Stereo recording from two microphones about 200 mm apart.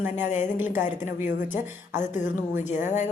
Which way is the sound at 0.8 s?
40° left (ahead or behind).